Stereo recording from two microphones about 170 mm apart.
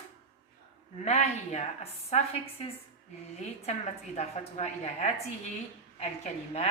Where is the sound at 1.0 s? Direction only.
40° left (ahead or behind).